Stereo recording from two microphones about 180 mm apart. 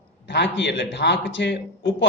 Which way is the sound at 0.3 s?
75° left (ahead or behind).